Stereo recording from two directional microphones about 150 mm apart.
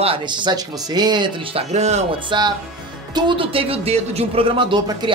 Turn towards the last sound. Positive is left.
turn(degrees=-35)  # may be behind; listen again after turning